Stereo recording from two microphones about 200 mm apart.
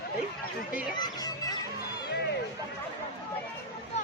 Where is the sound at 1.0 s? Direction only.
20° left (ahead or behind).